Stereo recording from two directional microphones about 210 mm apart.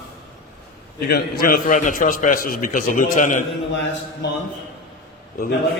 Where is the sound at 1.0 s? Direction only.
45° left (ahead or behind).